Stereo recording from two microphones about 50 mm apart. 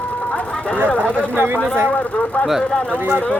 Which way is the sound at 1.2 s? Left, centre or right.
Right.